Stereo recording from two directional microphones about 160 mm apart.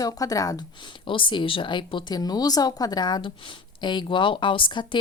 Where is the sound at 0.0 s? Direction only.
20° left (ahead or behind).